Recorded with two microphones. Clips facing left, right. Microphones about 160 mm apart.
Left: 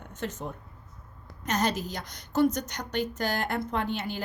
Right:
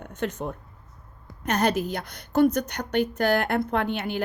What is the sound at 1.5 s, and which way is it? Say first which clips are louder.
A woman's voice: right 5 dB; 60° right (ahead or behind).